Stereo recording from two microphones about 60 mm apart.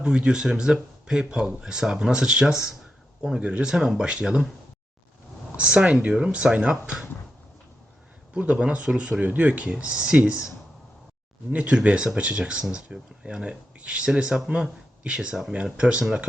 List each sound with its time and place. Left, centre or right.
0.0 s speech: centre
5.5 s speech: centre
8.3 s speech: centre
11.5 s speech: centre